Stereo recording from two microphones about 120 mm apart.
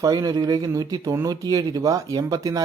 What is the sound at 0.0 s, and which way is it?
Speech, 35° right (ahead or behind).